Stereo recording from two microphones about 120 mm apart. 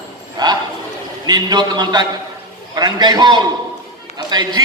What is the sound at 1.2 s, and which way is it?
A man's voice, 35° right (ahead or behind).